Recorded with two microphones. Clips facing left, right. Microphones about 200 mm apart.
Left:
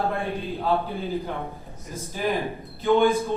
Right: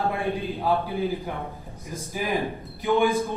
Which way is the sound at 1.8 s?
15° right (ahead or behind).